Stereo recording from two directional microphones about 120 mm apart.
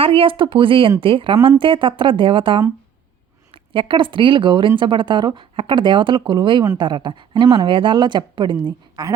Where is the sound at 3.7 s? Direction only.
45° right (ahead or behind).